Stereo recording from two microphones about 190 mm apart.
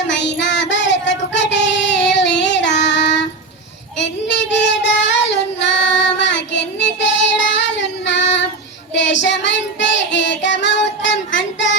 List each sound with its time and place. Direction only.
0.1 s child singing: 70° left (ahead or behind)